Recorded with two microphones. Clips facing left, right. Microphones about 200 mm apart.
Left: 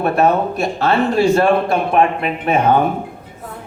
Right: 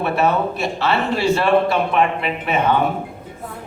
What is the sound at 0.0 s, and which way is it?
A man's voice, 50° left (ahead or behind).